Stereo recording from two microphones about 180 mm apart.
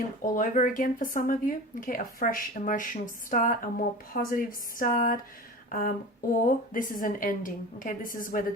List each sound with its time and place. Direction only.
0.2 s a woman's voice: 45° left (ahead or behind)